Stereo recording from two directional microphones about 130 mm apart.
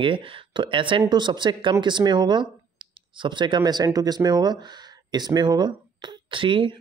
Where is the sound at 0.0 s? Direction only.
40° right (ahead or behind).